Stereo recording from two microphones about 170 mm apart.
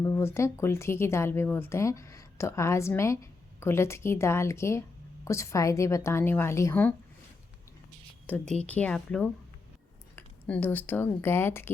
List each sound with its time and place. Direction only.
0.0 s speech: 15° left (ahead or behind)
8.6 s speech: 10° left (ahead or behind)